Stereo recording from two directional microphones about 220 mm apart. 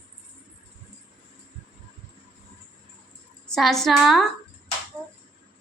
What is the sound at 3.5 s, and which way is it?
Speech, centre (ahead or behind).